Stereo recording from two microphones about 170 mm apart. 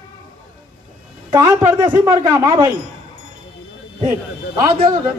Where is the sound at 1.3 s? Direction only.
20° right (ahead or behind).